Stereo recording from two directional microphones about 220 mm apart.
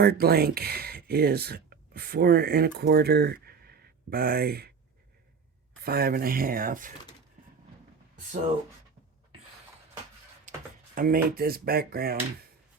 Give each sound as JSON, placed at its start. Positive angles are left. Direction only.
{"t": 0.0, "sound": "speech", "side_deg": -45}
{"t": 5.8, "sound": "speech", "side_deg": -45}
{"t": 10.5, "sound": "a sound", "side_deg": -35}
{"t": 10.9, "sound": "speech", "side_deg": -40}